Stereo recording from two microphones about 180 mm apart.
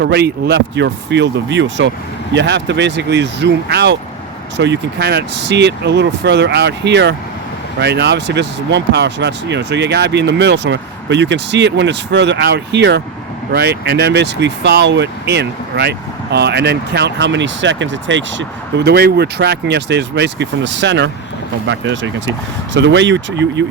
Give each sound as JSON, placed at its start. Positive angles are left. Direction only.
{"t": 0.0, "sound": "speech", "side_deg": -65}
{"t": 2.3, "sound": "speech", "side_deg": -75}
{"t": 21.7, "sound": "speech", "side_deg": -90}